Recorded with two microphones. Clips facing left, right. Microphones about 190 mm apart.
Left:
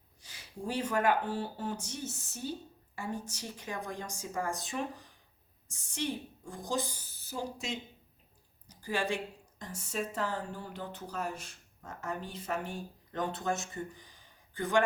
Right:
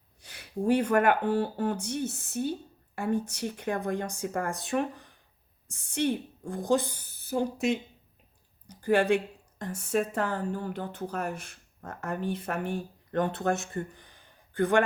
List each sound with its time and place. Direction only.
0.2 s speech: 60° right (ahead or behind)